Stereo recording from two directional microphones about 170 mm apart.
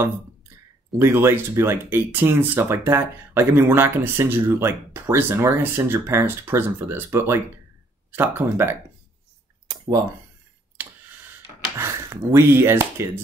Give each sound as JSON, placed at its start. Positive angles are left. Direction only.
{"t": 0.9, "sound": "speech", "side_deg": -15}
{"t": 11.8, "sound": "speech", "side_deg": -15}